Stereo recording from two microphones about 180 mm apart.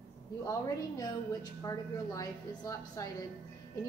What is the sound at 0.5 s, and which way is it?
A woman's voice, 20° left (ahead or behind).